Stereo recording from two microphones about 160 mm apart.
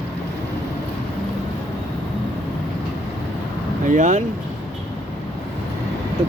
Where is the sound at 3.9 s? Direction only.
50° right (ahead or behind).